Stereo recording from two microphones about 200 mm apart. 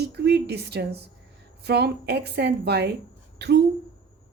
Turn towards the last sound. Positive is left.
turn(degrees=-55)  # may be behind; listen again after turning